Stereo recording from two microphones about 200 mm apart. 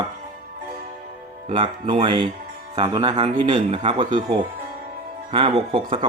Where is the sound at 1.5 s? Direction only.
25° right (ahead or behind).